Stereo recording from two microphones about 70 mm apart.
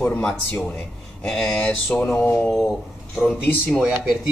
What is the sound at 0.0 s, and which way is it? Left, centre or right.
Speech, centre.